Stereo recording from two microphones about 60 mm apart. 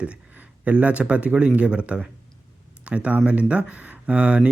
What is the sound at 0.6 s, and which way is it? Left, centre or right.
Speech, right.